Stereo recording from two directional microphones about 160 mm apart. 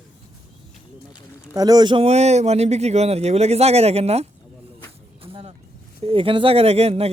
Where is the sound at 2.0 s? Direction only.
45° right (ahead or behind).